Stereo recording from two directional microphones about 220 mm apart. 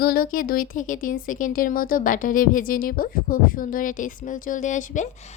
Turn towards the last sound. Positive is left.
turn(degrees=30)  # may be behind; listen again after turning